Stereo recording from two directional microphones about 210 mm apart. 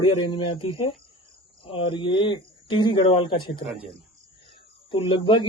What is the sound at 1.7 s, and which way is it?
Speech, 25° left (ahead or behind).